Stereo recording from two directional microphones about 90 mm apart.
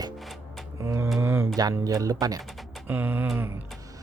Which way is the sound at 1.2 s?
25° right (ahead or behind).